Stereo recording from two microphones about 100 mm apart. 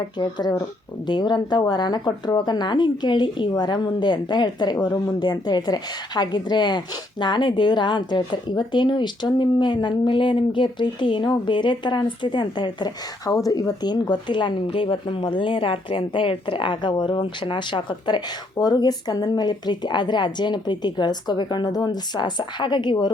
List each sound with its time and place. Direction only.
0.2 s a woman's voice: 45° left (ahead or behind)